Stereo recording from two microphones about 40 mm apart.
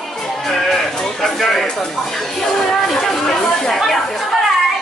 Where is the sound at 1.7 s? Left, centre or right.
Centre.